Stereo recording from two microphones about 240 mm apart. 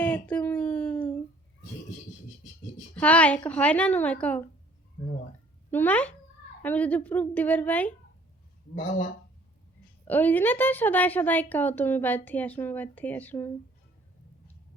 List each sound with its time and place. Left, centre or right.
0.0 s a sound: centre
2.9 s a woman's voice: centre
5.7 s a woman's voice: centre
8.7 s speech: left
10.1 s a woman's voice: centre